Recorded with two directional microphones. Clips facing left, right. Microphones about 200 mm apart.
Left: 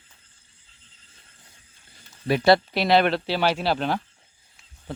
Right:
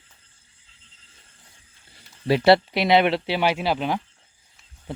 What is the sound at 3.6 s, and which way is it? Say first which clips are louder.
Speech: even; 10° right (ahead or behind).